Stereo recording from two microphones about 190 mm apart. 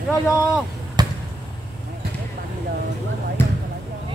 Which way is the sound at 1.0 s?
20° right (ahead or behind).